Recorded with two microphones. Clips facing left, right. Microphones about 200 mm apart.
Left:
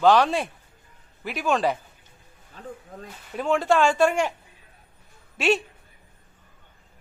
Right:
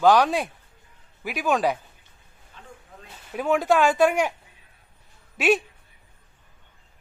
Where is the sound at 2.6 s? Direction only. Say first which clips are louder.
Left 9 dB; 40° left (ahead or behind).